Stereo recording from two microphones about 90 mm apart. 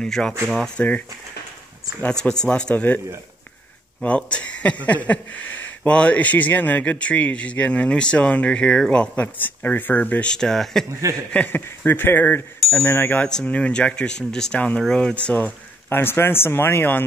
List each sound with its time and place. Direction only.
0.0 s speech: 5° left (ahead or behind)
2.0 s speech: 10° left (ahead or behind)
4.0 s speech: 15° left (ahead or behind)
10.3 s speech: 5° left (ahead or behind)
10.9 s speech: 35° right (ahead or behind)
11.3 s speech: 20° left (ahead or behind)
13.3 s speech: 10° left (ahead or behind)